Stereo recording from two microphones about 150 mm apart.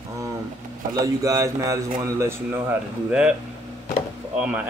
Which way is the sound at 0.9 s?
25° right (ahead or behind).